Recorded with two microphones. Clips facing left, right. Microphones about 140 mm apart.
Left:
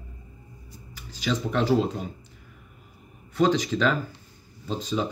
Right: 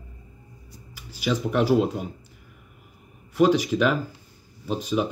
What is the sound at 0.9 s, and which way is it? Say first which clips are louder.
Speech: right 2 dB; 10° right (ahead or behind).